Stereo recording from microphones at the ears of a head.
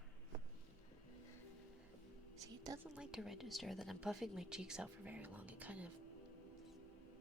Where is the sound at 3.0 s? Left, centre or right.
Centre.